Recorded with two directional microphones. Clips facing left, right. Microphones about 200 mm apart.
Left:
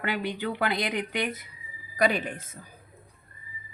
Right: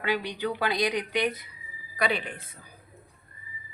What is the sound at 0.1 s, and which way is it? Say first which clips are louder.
Speech: right 3 dB; 50° left (ahead or behind).